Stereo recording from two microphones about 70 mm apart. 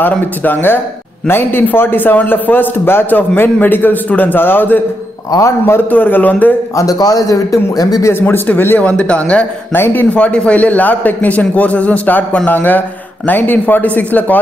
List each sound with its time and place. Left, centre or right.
0.0 s a man's voice: left
5.9 s a man's voice: left
6.8 s a man's voice: left
8.1 s a man's voice: left
9.8 s speech: left
10.1 s a man's voice: centre